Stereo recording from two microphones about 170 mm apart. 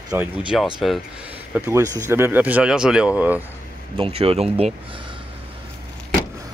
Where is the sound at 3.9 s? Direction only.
35° right (ahead or behind).